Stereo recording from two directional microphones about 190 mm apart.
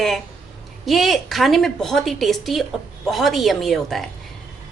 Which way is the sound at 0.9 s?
Centre (ahead or behind).